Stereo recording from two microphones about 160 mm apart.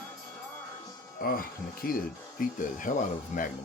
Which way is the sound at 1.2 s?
65° left (ahead or behind).